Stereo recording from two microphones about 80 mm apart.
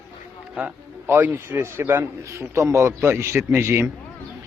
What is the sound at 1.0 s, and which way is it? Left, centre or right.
Speech, right.